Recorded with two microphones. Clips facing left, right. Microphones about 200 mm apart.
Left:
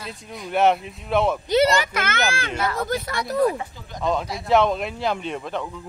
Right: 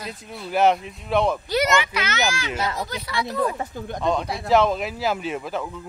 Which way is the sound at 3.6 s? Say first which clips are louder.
Right 5 dB; 50° right (ahead or behind).